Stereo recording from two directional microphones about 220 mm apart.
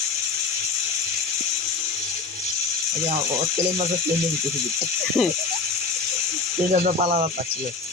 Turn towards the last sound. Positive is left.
turn(degrees=-30)  # may be behind; listen again after turning